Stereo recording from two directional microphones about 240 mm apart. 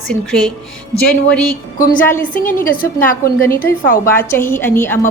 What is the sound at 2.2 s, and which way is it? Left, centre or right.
A woman's voice, left.